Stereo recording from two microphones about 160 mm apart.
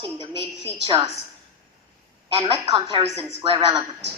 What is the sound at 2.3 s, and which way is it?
A woman's voice, 35° right (ahead or behind).